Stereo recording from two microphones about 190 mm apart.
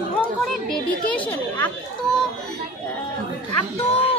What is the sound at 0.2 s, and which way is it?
Speech, 5° left (ahead or behind).